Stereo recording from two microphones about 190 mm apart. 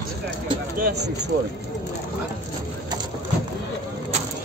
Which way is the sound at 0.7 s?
50° right (ahead or behind).